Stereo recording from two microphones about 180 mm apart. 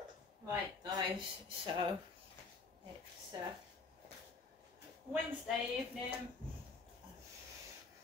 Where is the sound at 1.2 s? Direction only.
25° right (ahead or behind).